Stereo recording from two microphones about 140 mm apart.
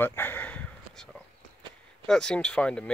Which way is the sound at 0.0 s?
15° left (ahead or behind).